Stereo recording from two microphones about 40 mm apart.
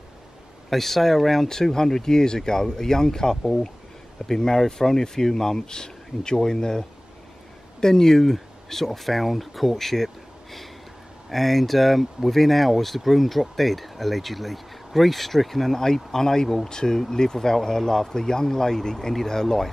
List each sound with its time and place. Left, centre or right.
0.7 s speech: centre
1.5 s speech: centre